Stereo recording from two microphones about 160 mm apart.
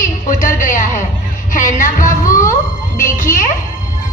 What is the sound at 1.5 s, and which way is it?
Music, 55° left (ahead or behind).